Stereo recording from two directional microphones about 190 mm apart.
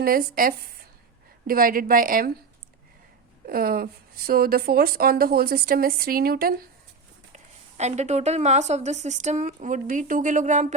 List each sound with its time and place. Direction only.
0.0 s a woman's voice: 50° right (ahead or behind)
3.4 s a woman's voice: 50° right (ahead or behind)
7.3 s a woman's voice: 35° right (ahead or behind)